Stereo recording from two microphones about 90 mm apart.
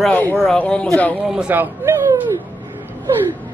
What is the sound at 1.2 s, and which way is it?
Speech, 10° right (ahead or behind).